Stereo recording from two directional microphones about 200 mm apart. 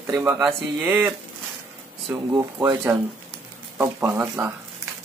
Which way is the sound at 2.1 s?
15° right (ahead or behind).